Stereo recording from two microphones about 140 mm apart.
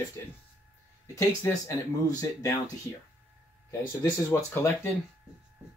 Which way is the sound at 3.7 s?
20° left (ahead or behind).